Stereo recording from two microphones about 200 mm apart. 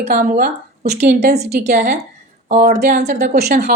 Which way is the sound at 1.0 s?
35° right (ahead or behind).